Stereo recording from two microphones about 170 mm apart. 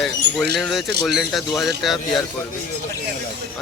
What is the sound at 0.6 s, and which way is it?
Speech, centre (ahead or behind).